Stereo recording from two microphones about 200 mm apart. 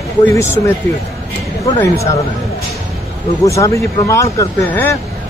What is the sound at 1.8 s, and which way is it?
Speech, 15° left (ahead or behind).